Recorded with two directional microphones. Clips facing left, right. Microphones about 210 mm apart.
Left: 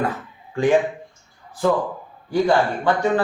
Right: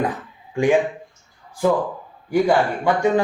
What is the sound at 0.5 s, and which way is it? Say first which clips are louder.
Speech: even; 10° right (ahead or behind).